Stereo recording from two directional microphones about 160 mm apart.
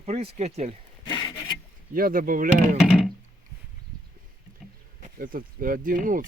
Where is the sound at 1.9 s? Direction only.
65° right (ahead or behind).